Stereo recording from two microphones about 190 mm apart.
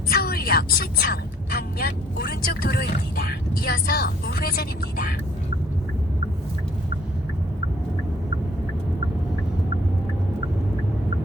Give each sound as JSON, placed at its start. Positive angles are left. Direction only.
{"t": 0.1, "sound": "speech", "side_deg": 50}